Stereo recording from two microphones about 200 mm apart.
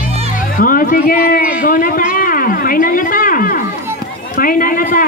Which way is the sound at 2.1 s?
45° left (ahead or behind).